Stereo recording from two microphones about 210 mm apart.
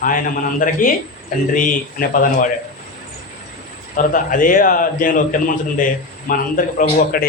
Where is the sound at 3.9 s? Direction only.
40° left (ahead or behind).